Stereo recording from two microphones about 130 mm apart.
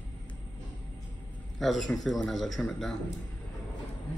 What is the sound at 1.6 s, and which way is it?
A man's voice, centre (ahead or behind).